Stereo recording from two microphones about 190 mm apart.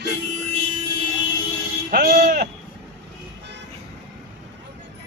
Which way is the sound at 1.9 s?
45° right (ahead or behind).